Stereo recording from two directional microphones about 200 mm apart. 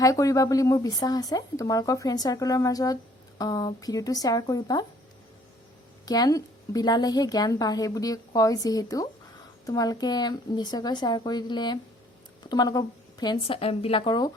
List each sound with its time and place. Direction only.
0.0 s speech: 15° left (ahead or behind)
6.1 s a woman's voice: 20° left (ahead or behind)